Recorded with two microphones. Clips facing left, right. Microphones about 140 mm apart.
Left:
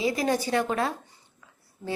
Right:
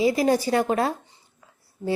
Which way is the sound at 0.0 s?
35° right (ahead or behind).